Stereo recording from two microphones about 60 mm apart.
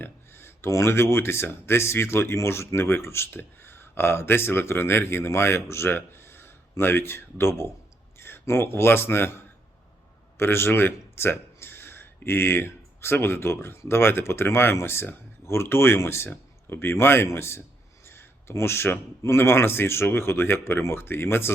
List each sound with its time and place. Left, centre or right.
0.0 s a man's voice: left